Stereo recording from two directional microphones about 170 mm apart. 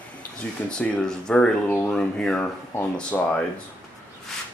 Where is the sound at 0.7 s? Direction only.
5° left (ahead or behind).